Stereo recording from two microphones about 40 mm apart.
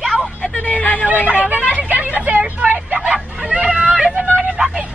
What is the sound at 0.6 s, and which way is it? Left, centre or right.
Hubbub, left.